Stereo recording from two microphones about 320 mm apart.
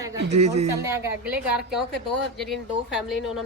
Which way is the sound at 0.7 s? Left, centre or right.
Centre.